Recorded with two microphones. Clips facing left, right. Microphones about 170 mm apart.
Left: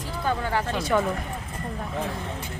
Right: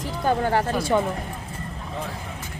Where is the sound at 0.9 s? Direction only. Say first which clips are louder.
Right 1 dB; 20° right (ahead or behind).